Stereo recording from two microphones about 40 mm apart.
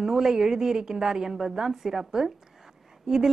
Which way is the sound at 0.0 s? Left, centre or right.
Centre.